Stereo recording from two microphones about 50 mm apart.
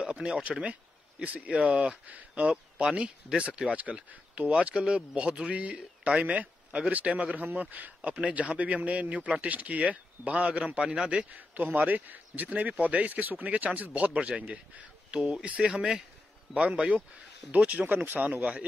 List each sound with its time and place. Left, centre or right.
0.0 s speech: centre
2.0 s speech: right
2.5 s a man's voice: centre
6.2 s speech: right
11.3 s speech: right
15.0 s speech: centre; by 18.2 s right
18.2 s speech: right